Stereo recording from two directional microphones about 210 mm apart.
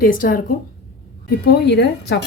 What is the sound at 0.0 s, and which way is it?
Speech, 40° left (ahead or behind).